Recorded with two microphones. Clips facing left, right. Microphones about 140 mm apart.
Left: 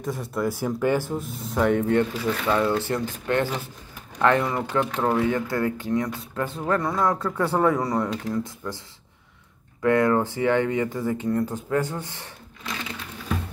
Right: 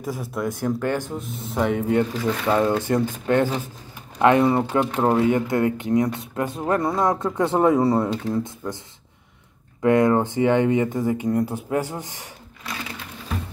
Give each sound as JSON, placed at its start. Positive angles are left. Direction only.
{"t": 0.0, "sound": "speech", "side_deg": 0}
{"t": 4.5, "sound": "speech", "side_deg": -25}
{"t": 9.8, "sound": "speech", "side_deg": -20}